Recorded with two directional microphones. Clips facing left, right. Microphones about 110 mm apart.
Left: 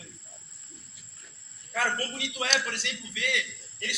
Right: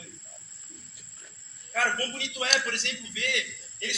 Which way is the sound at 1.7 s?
15° left (ahead or behind).